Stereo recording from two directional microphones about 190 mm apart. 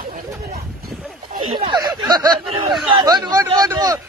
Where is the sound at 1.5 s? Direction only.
25° right (ahead or behind).